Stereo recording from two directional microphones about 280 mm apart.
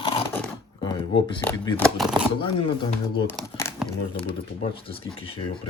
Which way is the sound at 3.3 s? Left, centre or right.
Centre.